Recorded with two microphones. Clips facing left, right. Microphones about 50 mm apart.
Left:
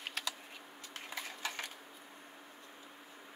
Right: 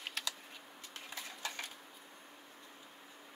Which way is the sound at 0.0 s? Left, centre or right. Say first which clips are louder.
Left 1 dB; centre.